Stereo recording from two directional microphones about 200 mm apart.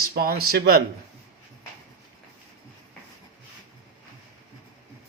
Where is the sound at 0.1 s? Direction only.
50° right (ahead or behind).